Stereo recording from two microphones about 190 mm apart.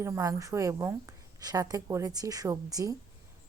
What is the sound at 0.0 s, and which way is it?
Speech, 15° right (ahead or behind).